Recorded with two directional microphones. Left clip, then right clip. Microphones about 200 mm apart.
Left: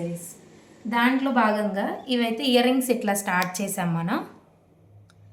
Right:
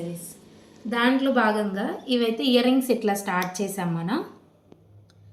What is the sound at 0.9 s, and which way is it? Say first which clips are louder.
A woman's voice: even; 30° left (ahead or behind).